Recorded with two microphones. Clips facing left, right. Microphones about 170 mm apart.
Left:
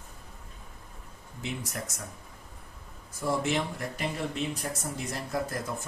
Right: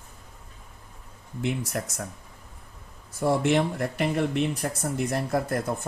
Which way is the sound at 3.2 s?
65° right (ahead or behind).